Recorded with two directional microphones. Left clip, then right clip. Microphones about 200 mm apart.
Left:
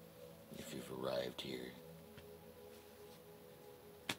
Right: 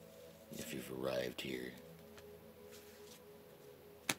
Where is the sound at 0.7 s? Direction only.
30° right (ahead or behind).